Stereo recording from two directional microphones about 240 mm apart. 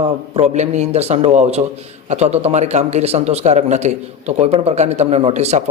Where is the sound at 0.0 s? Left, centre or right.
Right.